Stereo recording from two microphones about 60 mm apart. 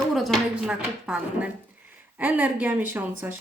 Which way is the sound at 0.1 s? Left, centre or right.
Centre.